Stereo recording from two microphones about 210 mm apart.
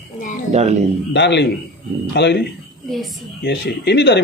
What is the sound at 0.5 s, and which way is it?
Speech, 30° right (ahead or behind).